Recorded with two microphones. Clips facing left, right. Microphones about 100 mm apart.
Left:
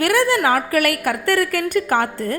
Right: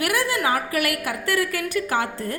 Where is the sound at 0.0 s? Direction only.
65° left (ahead or behind).